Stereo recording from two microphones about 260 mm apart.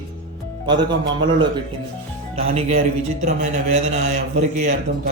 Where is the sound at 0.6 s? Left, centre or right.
Centre.